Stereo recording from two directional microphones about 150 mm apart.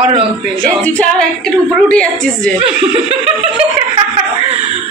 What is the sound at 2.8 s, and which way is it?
Speech, 40° right (ahead or behind).